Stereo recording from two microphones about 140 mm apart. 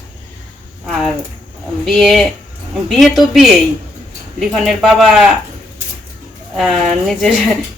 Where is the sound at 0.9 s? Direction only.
Centre (ahead or behind).